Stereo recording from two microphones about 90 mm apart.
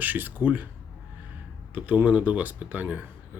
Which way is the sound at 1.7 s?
15° right (ahead or behind).